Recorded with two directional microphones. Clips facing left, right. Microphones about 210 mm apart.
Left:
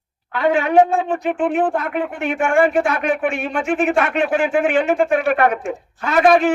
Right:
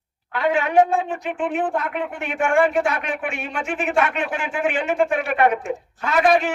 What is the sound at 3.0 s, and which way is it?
Speech, 45° left (ahead or behind).